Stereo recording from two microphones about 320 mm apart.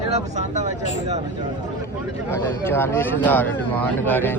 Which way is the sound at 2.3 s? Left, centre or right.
Centre.